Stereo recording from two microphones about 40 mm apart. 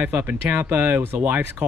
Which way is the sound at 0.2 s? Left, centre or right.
Right.